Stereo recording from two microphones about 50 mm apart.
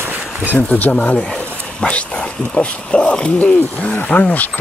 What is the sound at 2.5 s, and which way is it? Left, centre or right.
Speech, centre.